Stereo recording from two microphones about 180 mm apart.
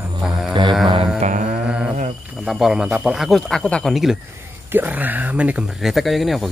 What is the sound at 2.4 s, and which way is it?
Speech, centre (ahead or behind).